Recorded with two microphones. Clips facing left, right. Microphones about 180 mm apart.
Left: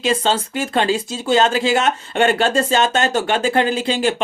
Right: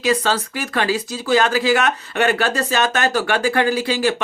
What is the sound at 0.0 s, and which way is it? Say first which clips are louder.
Speech: even; 25° left (ahead or behind).